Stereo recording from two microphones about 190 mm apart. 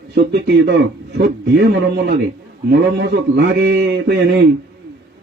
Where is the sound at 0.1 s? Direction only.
65° right (ahead or behind).